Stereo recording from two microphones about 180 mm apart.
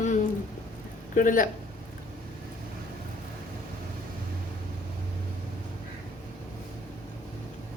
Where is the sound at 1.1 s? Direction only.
50° left (ahead or behind).